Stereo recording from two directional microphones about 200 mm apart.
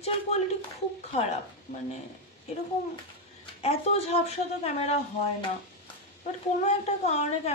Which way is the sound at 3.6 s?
30° left (ahead or behind).